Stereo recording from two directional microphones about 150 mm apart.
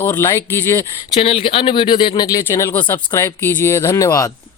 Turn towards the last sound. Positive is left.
turn(degrees=25)  # may be behind; listen again after turning